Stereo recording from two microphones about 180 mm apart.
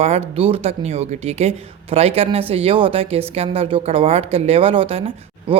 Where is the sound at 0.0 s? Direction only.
35° right (ahead or behind).